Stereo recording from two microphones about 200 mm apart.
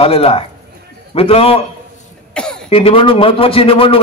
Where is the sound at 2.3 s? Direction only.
5° left (ahead or behind).